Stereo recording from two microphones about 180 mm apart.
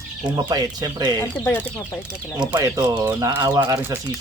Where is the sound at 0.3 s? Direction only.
20° right (ahead or behind).